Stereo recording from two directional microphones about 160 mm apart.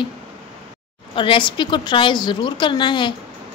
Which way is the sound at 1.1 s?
30° left (ahead or behind).